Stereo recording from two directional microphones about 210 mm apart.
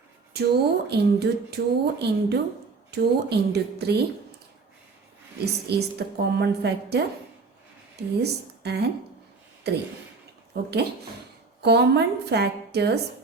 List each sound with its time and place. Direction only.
0.3 s speech: 50° right (ahead or behind)
5.6 s speech: 50° right (ahead or behind)
8.2 s speech: 50° right (ahead or behind)